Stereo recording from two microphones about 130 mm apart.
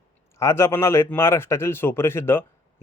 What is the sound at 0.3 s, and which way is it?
A man's voice, 20° left (ahead or behind).